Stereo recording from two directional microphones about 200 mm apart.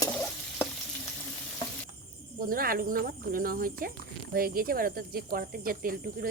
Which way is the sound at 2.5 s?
45° right (ahead or behind).